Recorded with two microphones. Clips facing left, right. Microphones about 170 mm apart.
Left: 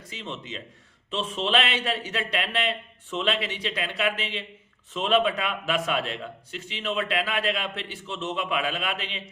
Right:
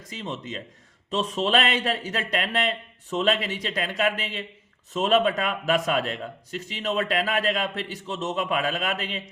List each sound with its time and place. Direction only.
0.1 s a man's voice: 40° right (ahead or behind)